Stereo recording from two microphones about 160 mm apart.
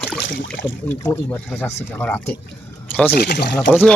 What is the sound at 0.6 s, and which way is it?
Speech, 15° left (ahead or behind).